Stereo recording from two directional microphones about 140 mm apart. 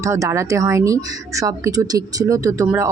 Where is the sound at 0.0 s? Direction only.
20° right (ahead or behind).